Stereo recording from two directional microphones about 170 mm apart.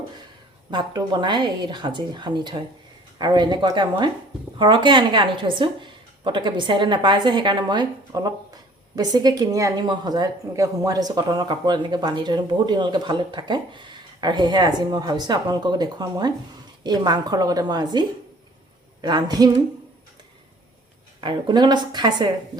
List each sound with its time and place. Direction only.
0.7 s a woman's voice: 25° right (ahead or behind)
19.0 s a woman's voice: 25° right (ahead or behind)
21.2 s a woman's voice: 25° right (ahead or behind)